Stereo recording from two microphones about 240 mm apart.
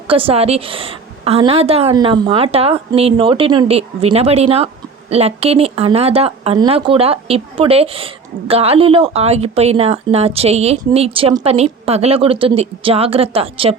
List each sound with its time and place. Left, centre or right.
0.1 s a woman's voice: right